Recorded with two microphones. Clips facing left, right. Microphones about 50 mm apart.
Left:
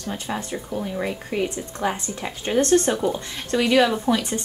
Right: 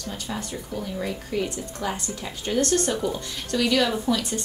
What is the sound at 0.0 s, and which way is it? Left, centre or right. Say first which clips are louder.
A woman's voice: left 3 dB; left.